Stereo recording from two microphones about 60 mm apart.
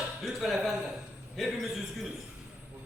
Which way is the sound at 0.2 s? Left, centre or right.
Centre.